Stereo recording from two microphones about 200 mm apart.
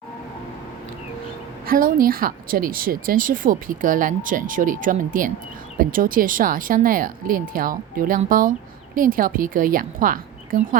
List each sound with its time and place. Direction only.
1.6 s speech: 45° right (ahead or behind)